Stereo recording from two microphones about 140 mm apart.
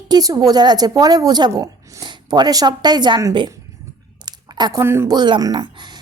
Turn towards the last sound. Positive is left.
turn(degrees=-30)  # may be behind; listen again after turning